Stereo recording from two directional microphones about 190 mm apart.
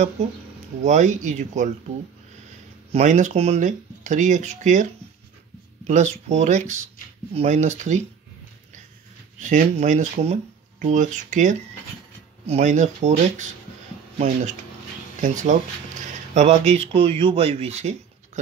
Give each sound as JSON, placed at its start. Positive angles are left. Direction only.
{"t": 0.8, "sound": "speech", "side_deg": -40}
{"t": 2.9, "sound": "speech", "side_deg": -40}
{"t": 5.9, "sound": "speech", "side_deg": -40}
{"t": 9.4, "sound": "speech", "side_deg": -40}